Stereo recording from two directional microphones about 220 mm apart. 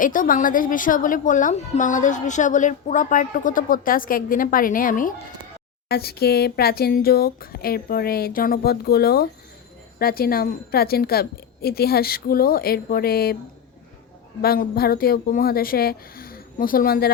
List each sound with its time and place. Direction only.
0.0 s a woman's voice: 35° left (ahead or behind)
14.4 s speech: 45° left (ahead or behind)